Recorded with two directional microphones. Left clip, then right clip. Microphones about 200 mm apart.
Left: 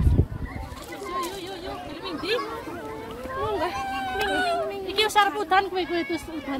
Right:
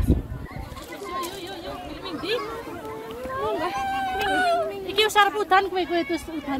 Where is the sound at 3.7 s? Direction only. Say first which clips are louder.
Right 3 dB; 50° right (ahead or behind).